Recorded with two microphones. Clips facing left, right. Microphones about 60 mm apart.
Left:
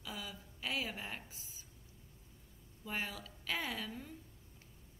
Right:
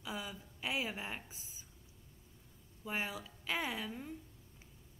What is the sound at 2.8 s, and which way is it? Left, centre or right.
A woman's voice, centre.